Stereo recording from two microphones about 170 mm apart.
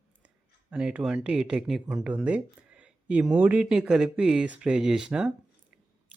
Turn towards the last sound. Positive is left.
turn(degrees=-5)  # may be behind; listen again after turning